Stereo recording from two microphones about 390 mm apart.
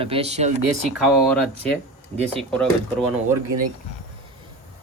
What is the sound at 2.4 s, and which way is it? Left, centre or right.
Speech, centre.